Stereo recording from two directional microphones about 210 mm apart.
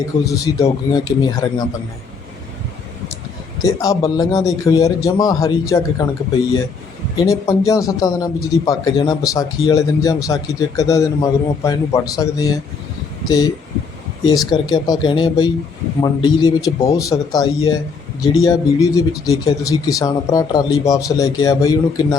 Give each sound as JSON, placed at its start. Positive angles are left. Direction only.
{"t": 0.3, "sound": "speech", "side_deg": 15}
{"t": 3.6, "sound": "speech", "side_deg": 15}
{"t": 7.2, "sound": "speech", "side_deg": 15}